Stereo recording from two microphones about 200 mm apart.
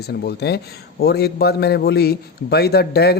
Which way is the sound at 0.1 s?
55° left (ahead or behind).